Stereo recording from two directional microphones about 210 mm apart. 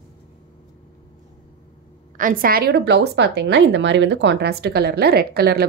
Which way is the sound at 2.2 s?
40° right (ahead or behind).